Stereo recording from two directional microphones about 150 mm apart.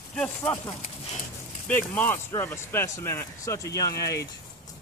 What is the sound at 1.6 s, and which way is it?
Speech, 10° left (ahead or behind).